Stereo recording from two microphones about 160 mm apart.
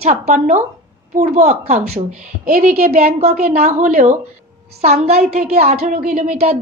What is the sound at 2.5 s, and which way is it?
Speech, 65° right (ahead or behind).